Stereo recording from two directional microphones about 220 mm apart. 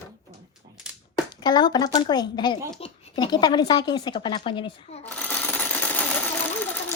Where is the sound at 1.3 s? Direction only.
20° left (ahead or behind).